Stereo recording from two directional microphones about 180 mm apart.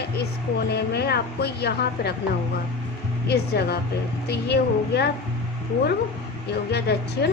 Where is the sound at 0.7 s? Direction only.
65° left (ahead or behind).